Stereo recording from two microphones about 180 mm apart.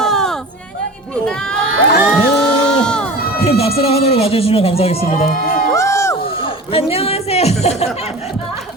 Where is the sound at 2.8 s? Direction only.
5° left (ahead or behind).